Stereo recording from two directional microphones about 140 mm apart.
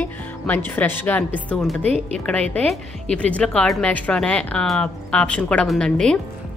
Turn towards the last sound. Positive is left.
turn(degrees=5)  # may be behind; listen again after turning